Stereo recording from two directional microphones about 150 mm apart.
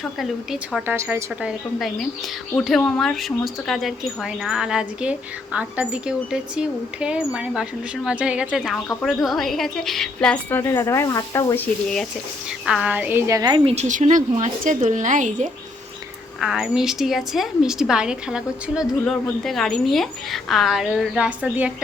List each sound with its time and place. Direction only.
0.2 s speech: centre (ahead or behind)
0.9 s a woman's voice: 15° right (ahead or behind); by 10.6 s 5° left (ahead or behind)
10.6 s speech: 20° left (ahead or behind)
12.5 s a woman's voice: 5° right (ahead or behind); by 13.6 s 25° right (ahead or behind)
13.7 s a woman's voice: 50° right (ahead or behind)
16.4 s speech: 5° right (ahead or behind)